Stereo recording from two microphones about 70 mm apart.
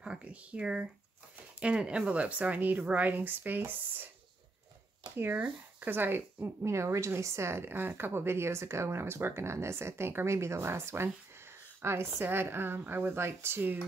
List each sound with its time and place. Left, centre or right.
0.0 s a woman's voice: centre
5.1 s speech: right